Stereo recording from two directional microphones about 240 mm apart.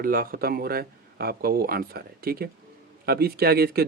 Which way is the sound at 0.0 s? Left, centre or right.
Right.